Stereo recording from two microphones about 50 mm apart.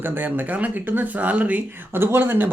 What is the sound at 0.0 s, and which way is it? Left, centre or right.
Speech, right.